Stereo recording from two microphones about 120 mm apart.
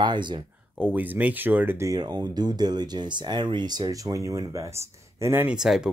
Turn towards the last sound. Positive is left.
turn(degrees=-5)  # may be behind; listen again after turning